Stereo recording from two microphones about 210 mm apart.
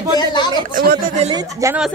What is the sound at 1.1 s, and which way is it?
Speech, 30° right (ahead or behind).